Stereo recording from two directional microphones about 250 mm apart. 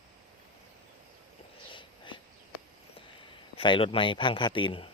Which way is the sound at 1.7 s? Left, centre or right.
Centre.